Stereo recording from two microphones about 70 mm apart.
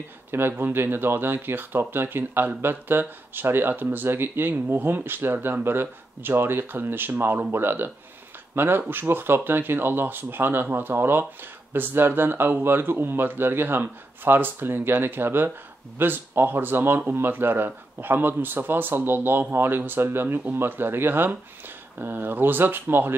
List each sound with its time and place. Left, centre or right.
0.3 s speech: right